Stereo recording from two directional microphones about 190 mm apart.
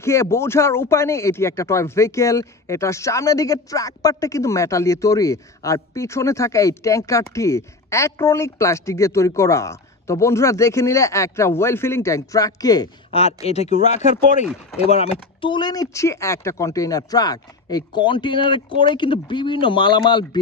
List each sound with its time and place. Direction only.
0.0 s speech: 15° left (ahead or behind)
13.1 s speech: 30° left (ahead or behind)